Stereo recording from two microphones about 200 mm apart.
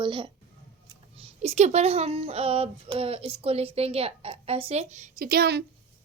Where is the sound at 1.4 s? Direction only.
35° right (ahead or behind).